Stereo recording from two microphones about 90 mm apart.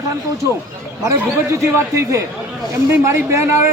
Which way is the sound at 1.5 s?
35° right (ahead or behind).